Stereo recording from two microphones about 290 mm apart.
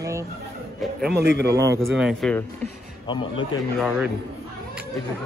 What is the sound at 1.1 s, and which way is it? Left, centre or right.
Speech, right.